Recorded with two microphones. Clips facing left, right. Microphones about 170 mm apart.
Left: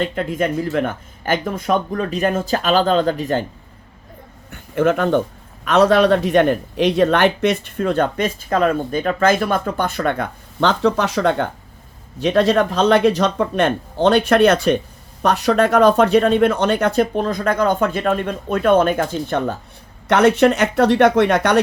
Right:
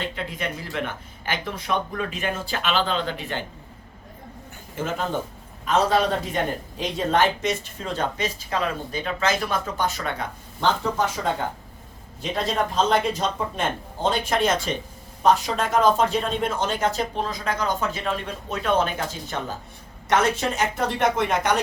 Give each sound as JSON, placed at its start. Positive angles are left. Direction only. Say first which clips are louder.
{"t": 0.0, "sound": "speech", "louder": "left 10 dB", "side_deg": 50}
{"t": 4.5, "sound": "speech", "louder": "left 12 dB", "side_deg": 65}